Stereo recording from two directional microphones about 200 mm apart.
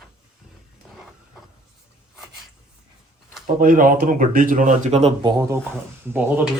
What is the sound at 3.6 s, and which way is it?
Speech, 45° right (ahead or behind).